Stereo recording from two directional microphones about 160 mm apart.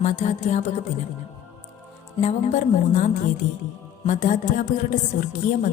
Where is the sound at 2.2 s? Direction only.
50° left (ahead or behind).